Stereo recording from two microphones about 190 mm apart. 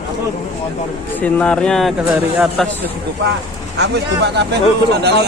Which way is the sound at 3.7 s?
60° right (ahead or behind).